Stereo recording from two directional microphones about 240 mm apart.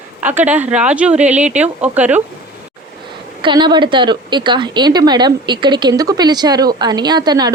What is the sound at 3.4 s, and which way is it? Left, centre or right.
A woman's voice, centre.